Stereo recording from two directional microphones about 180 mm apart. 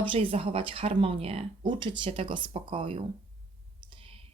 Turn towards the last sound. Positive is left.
turn(degrees=-30)  # may be behind; listen again after turning